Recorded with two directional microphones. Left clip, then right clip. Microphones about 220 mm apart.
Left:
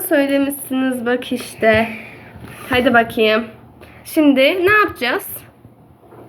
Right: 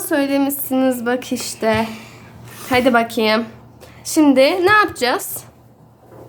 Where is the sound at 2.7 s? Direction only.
35° right (ahead or behind).